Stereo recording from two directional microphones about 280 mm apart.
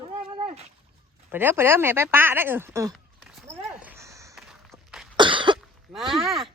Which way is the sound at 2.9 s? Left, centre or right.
Centre.